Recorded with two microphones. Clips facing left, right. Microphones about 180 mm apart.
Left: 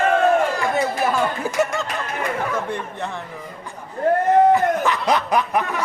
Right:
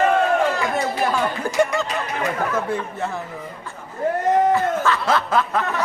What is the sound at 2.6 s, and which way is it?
Speech, 5° right (ahead or behind).